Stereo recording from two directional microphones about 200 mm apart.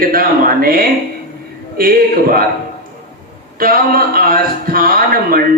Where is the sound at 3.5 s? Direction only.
45° right (ahead or behind).